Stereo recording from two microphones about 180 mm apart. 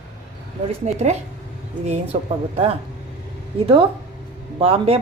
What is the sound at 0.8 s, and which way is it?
Speech, 40° right (ahead or behind).